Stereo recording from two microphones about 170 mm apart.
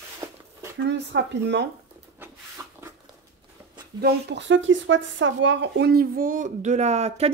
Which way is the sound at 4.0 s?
90° right.